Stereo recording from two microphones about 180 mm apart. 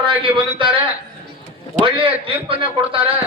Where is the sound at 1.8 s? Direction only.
30° right (ahead or behind).